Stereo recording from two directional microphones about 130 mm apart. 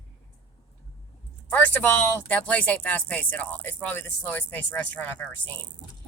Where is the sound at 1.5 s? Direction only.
10° left (ahead or behind).